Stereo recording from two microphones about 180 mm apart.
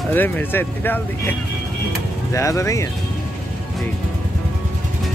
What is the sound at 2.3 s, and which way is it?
Speech, 15° left (ahead or behind).